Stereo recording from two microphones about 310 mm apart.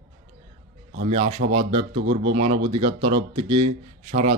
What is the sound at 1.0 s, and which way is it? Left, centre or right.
Speech, centre.